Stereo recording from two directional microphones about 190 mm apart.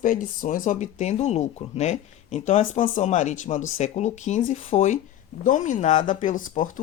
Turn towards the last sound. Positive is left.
turn(degrees=45)  # may be behind; listen again after turning